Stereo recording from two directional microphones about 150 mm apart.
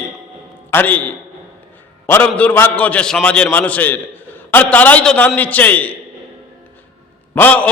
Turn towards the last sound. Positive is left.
turn(degrees=10)  # may be behind; listen again after turning